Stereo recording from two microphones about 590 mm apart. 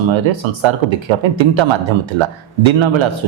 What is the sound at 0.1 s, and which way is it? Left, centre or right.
A man's voice, right.